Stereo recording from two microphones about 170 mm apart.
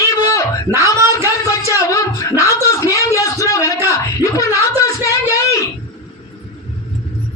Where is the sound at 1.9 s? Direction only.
20° left (ahead or behind).